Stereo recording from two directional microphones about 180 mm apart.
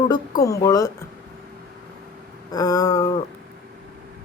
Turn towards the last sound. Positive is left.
turn(degrees=20)  # may be behind; listen again after turning